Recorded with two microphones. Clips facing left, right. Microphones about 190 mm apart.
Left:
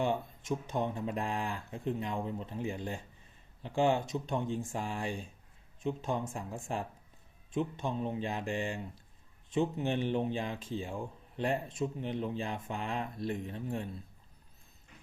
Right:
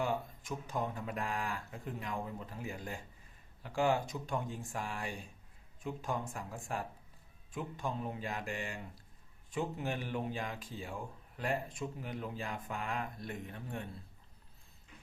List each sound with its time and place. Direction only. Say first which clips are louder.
0.0 s speech: left 3 dB; 25° left (ahead or behind)